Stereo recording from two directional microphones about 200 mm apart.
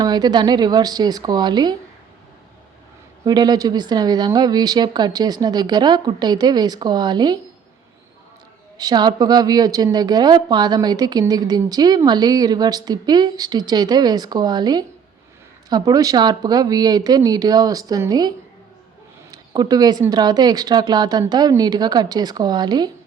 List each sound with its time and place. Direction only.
0.0 s a woman's voice: 20° right (ahead or behind)
3.2 s a woman's voice: 20° right (ahead or behind)
8.8 s a woman's voice: 20° right (ahead or behind)